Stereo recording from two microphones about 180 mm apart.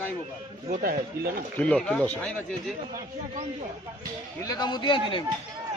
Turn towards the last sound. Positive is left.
turn(degrees=30)  # may be behind; listen again after turning